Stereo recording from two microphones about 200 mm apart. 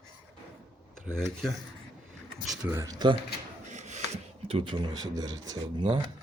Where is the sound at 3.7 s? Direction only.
35° right (ahead or behind).